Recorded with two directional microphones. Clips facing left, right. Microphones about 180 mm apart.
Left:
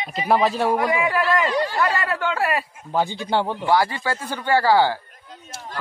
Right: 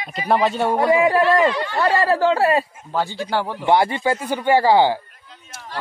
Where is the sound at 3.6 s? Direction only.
20° right (ahead or behind).